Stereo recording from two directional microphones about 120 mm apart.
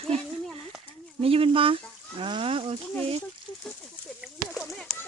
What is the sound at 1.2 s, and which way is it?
Speech, 55° right (ahead or behind).